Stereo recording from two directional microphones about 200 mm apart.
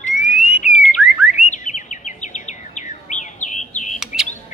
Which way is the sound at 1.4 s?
35° left (ahead or behind).